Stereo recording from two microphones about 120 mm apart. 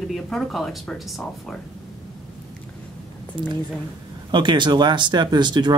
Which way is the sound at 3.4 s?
40° right (ahead or behind).